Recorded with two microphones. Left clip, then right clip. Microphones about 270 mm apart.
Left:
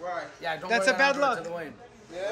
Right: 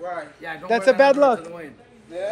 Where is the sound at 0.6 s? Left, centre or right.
Centre.